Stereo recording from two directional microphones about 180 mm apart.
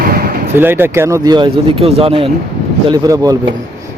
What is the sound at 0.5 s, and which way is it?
Speech, 10° right (ahead or behind).